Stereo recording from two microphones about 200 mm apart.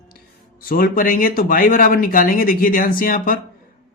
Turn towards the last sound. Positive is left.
turn(degrees=45)  # may be behind; listen again after turning